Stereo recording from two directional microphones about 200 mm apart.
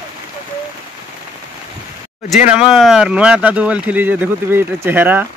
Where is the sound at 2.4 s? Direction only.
5° right (ahead or behind).